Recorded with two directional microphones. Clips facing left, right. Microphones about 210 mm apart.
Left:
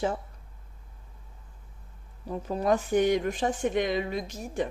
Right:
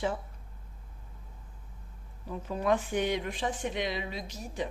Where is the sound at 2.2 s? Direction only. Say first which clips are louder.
Left 3 dB; 40° left (ahead or behind).